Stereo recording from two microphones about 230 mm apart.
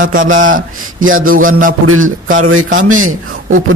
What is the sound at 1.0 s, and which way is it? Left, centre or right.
Mantra, right.